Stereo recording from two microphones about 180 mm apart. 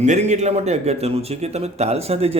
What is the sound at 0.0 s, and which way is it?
A man's voice, 40° right (ahead or behind).